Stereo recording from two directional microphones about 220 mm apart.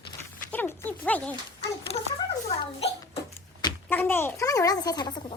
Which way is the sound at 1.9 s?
25° left (ahead or behind).